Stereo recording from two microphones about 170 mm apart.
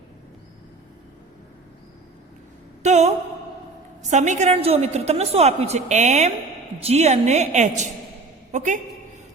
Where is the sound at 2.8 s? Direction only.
40° right (ahead or behind).